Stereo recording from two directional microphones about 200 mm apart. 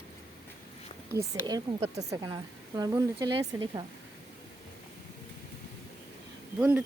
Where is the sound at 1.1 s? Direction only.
20° right (ahead or behind).